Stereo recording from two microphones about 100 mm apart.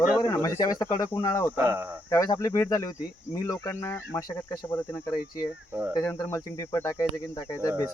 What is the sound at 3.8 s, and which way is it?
Speech, 25° left (ahead or behind).